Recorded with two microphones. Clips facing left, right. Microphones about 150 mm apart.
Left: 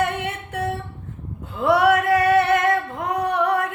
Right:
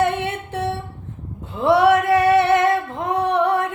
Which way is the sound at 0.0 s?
25° right (ahead or behind).